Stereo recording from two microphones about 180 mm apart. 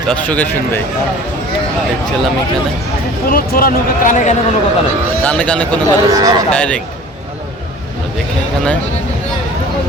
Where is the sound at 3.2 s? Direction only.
55° left (ahead or behind).